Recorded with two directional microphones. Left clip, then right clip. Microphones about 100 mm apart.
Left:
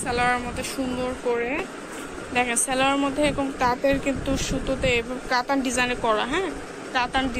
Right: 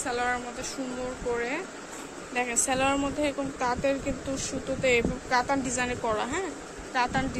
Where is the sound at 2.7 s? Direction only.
20° right (ahead or behind).